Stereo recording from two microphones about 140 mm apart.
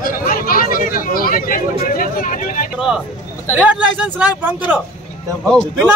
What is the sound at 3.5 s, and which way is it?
A man's voice, 10° right (ahead or behind).